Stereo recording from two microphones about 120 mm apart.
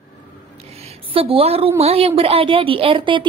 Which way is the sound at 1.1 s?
50° right (ahead or behind).